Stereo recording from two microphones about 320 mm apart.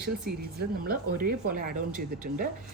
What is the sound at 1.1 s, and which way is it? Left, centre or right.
A woman's voice, right.